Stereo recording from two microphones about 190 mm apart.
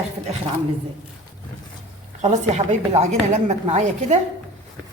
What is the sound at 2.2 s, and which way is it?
A woman's voice, 35° right (ahead or behind).